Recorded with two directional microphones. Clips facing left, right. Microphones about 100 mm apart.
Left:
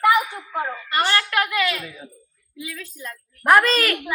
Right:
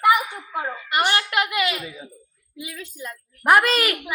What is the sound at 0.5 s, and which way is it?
A woman's voice, 15° right (ahead or behind).